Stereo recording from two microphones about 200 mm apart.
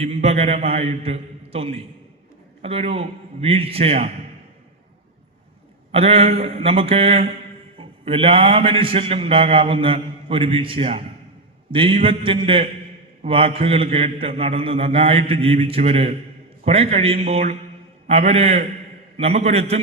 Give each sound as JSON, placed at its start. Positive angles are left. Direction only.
{"t": 0.0, "sound": "a man's voice", "side_deg": -30}
{"t": 5.9, "sound": "a man's voice", "side_deg": -30}